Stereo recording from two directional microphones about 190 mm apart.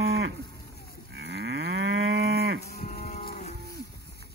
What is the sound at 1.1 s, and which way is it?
Moo, 60° right (ahead or behind).